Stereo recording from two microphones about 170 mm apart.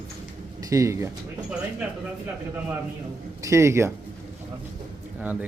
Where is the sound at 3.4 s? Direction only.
15° right (ahead or behind).